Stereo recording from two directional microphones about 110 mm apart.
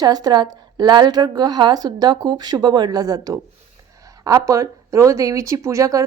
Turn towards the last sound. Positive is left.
turn(degrees=-30)  # may be behind; listen again after turning